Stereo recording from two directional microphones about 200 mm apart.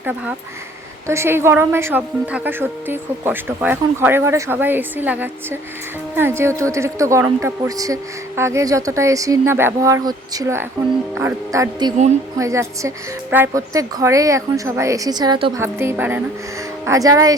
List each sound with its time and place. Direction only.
0.0 s a woman's voice: 10° right (ahead or behind)
15.6 s a woman's voice: 10° right (ahead or behind)